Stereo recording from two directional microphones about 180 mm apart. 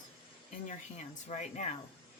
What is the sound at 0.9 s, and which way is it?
Speech, 40° left (ahead or behind).